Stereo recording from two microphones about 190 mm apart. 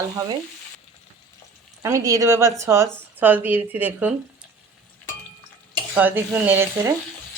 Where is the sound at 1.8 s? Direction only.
15° right (ahead or behind).